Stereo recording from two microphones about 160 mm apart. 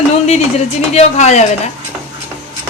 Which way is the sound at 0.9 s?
45° left (ahead or behind).